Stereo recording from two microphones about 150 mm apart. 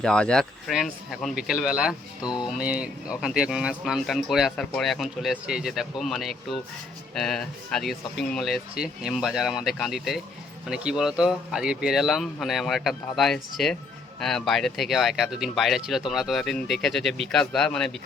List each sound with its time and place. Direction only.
0.0 s speech: 5° left (ahead or behind)